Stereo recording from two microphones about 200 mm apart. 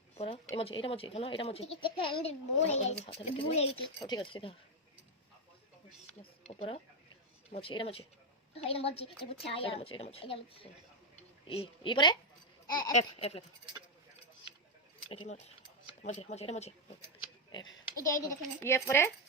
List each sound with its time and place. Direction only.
0.2 s a woman's voice: 25° left (ahead or behind)
6.5 s a woman's voice: 30° left (ahead or behind)
12.6 s a sound: 20° left (ahead or behind)
12.9 s speech: 30° left (ahead or behind)
15.1 s speech: 30° left (ahead or behind)
18.0 s speech: 15° left (ahead or behind)